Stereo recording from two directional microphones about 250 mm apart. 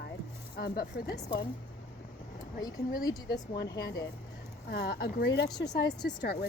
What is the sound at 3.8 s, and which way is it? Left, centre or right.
Speech, centre.